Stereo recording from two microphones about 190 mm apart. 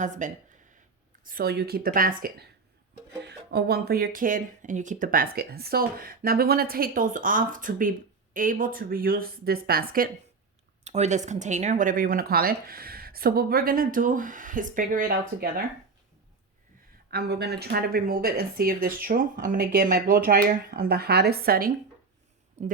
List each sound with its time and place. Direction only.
0.0 s speech: 40° right (ahead or behind)
10.8 s speech: 35° right (ahead or behind)
17.1 s speech: 55° right (ahead or behind)
22.6 s speech: 35° right (ahead or behind)